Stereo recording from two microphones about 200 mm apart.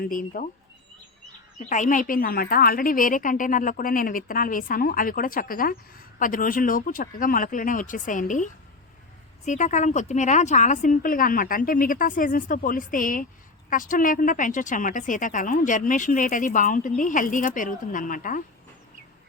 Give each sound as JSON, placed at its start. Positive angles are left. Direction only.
{"t": 0.0, "sound": "a woman's voice", "side_deg": 45}
{"t": 1.5, "sound": "a woman's voice", "side_deg": 40}
{"t": 9.5, "sound": "a woman's voice", "side_deg": 35}